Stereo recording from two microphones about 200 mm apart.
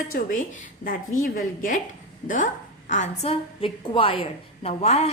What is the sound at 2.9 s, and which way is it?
A woman's voice, 35° left (ahead or behind).